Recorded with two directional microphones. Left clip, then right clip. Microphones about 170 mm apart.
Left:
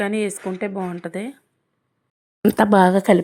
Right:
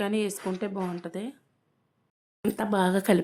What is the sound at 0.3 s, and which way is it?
Speech, 25° left (ahead or behind).